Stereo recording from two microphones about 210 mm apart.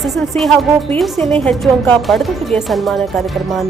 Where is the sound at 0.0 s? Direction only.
Centre (ahead or behind).